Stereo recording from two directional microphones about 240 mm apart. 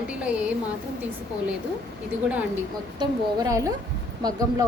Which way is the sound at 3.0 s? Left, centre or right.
Centre.